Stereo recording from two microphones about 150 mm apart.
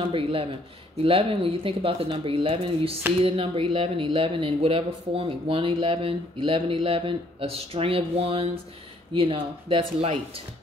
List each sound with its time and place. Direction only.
0.0 s speech: 35° right (ahead or behind)